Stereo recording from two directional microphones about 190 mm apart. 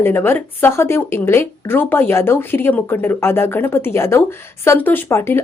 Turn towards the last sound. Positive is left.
turn(degrees=15)  # may be behind; listen again after turning